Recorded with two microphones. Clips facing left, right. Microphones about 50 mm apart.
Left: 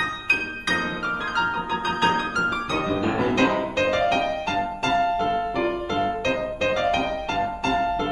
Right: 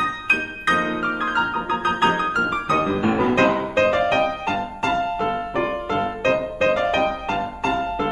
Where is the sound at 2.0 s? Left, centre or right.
Right.